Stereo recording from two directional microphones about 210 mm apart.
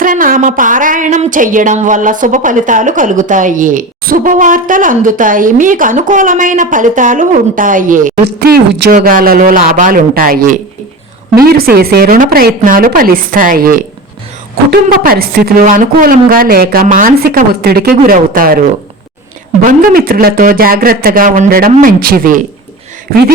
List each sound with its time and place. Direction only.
0.0 s a woman's voice: 40° right (ahead or behind)